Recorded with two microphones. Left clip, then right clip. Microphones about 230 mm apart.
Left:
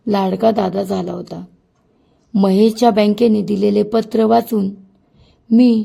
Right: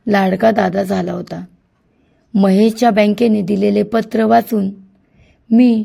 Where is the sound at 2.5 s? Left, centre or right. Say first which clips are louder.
Left 1 dB; centre.